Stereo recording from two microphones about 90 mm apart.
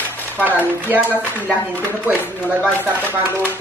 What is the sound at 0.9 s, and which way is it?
Speech, 25° right (ahead or behind).